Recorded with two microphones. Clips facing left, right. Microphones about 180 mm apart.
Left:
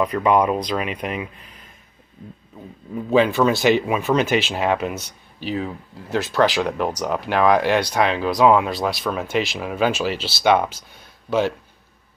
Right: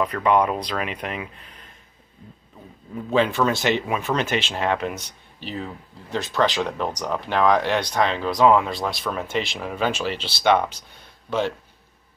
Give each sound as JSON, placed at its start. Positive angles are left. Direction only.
{"t": 0.0, "sound": "speech", "side_deg": 10}
{"t": 3.1, "sound": "speech", "side_deg": 10}